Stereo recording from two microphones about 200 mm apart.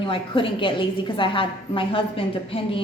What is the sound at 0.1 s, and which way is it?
A woman's voice, 25° left (ahead or behind).